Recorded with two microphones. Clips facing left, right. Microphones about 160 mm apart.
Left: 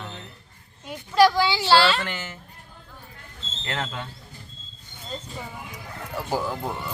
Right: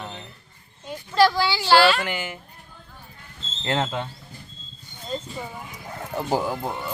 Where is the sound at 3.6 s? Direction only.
25° right (ahead or behind).